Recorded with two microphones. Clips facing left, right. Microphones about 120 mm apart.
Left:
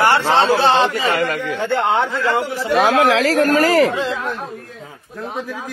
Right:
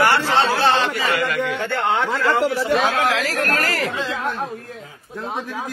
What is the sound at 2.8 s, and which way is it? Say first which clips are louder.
Speech: left 6 dB; 90° left.